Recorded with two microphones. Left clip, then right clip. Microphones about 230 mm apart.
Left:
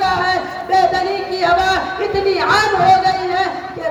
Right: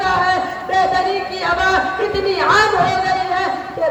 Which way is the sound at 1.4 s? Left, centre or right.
Left.